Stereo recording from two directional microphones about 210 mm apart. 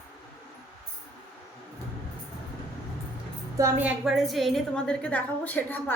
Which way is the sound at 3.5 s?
15° right (ahead or behind).